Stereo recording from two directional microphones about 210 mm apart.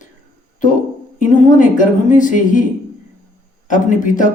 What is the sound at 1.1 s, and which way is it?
Speech, 40° left (ahead or behind).